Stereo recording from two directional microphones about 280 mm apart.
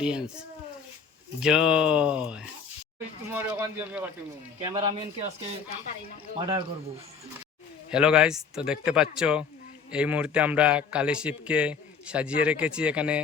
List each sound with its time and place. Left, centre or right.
0.0 s speech: centre
1.4 s speech: centre
4.6 s speech: centre
6.4 s speech: centre
7.9 s speech: centre